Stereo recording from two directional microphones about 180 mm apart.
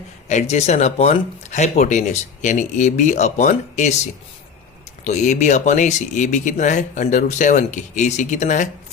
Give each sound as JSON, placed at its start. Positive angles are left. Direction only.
{"t": 0.3, "sound": "speech", "side_deg": 40}
{"t": 5.0, "sound": "speech", "side_deg": 40}